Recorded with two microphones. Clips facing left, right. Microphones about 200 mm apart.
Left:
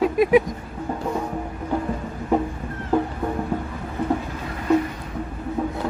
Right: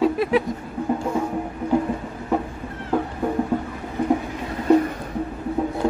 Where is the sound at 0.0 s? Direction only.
15° left (ahead or behind).